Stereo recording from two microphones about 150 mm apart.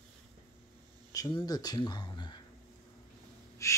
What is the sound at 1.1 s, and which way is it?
Speech, 25° left (ahead or behind).